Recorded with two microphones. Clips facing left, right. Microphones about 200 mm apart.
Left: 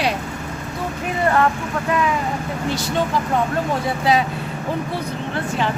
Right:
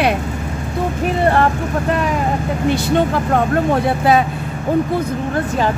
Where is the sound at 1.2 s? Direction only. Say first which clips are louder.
Right 2 dB; 30° right (ahead or behind).